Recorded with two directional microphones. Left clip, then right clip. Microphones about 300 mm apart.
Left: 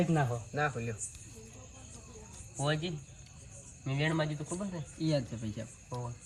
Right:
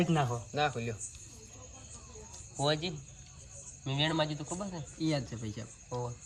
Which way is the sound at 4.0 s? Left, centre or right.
Right.